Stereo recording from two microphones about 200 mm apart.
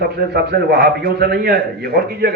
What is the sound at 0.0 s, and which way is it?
A man's voice, 50° right (ahead or behind).